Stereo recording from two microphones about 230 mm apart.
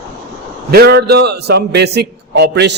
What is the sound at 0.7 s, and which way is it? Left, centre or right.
A man's voice, right.